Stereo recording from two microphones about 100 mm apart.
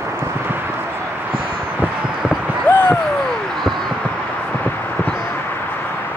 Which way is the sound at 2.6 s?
20° left (ahead or behind).